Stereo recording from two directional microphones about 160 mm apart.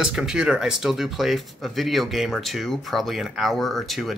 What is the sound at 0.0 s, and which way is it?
Speech, 5° right (ahead or behind).